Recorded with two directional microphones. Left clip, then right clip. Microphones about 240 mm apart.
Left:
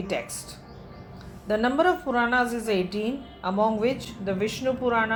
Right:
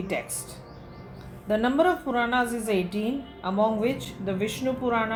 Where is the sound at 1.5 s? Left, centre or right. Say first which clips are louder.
Even; left.